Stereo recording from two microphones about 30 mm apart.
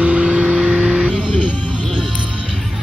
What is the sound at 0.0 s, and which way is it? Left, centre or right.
Vehicle, right.